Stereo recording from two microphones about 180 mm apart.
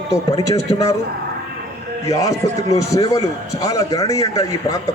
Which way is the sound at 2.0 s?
20° left (ahead or behind).